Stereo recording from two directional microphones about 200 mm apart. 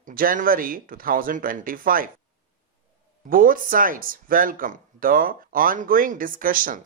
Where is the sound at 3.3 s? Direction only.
45° right (ahead or behind).